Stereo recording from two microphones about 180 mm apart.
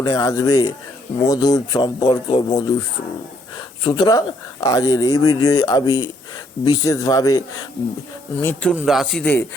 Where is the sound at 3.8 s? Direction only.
25° left (ahead or behind).